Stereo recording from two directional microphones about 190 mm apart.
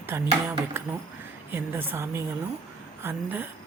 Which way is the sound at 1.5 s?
10° right (ahead or behind).